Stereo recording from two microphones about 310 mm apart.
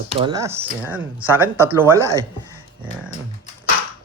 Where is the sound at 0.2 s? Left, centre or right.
Centre.